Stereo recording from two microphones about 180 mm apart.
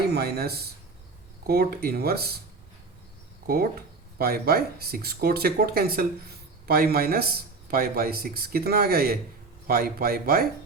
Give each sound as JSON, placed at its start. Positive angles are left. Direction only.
{"t": 0.1, "sound": "speech", "side_deg": -60}
{"t": 3.4, "sound": "speech", "side_deg": -55}